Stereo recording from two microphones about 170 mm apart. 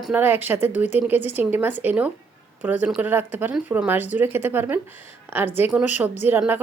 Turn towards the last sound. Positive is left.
turn(degrees=-10)  # may be behind; listen again after turning